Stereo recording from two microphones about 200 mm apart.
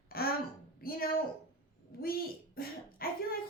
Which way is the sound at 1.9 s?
45° left (ahead or behind).